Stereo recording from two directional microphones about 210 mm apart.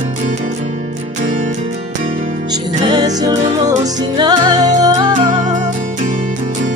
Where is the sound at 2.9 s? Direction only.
20° right (ahead or behind).